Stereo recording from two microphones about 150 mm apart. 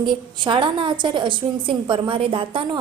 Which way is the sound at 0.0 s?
30° right (ahead or behind).